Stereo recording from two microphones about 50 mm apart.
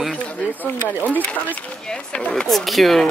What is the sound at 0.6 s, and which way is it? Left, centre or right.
Speech, left.